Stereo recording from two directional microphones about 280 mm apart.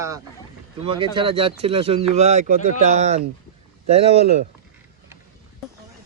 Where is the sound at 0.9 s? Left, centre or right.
Centre.